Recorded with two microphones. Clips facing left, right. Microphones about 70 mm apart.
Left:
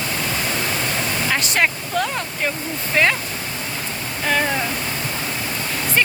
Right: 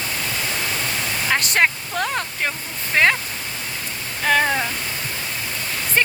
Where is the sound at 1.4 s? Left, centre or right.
Right.